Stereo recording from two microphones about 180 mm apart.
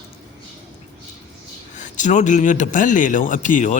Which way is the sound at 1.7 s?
45° left (ahead or behind).